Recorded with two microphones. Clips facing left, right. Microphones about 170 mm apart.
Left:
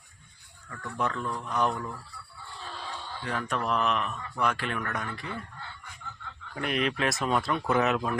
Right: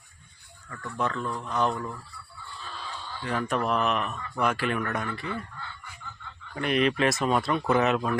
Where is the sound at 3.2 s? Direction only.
5° right (ahead or behind).